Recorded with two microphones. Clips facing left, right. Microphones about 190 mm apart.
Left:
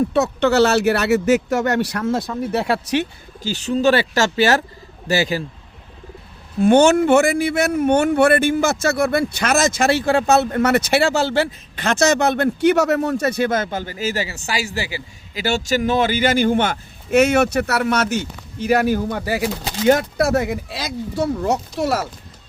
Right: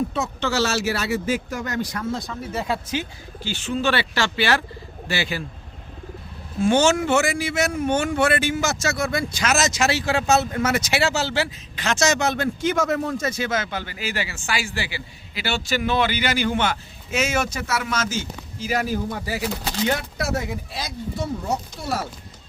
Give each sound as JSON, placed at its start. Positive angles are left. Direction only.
{"t": 0.1, "sound": "speech", "side_deg": 65}
{"t": 3.4, "sound": "speech", "side_deg": 40}
{"t": 6.6, "sound": "speech", "side_deg": 60}
{"t": 19.9, "sound": "speech", "side_deg": 50}